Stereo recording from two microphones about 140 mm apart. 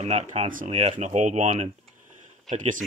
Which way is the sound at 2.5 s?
65° right (ahead or behind).